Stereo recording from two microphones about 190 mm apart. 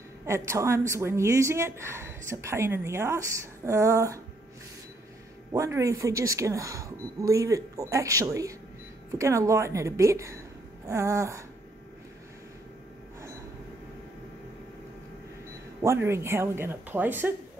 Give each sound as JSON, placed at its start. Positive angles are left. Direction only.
{"t": 0.3, "sound": "speech", "side_deg": -15}
{"t": 5.5, "sound": "speech", "side_deg": -15}
{"t": 15.8, "sound": "speech", "side_deg": -15}